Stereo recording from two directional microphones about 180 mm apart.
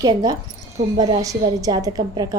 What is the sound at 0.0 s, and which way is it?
A woman's voice, 20° right (ahead or behind).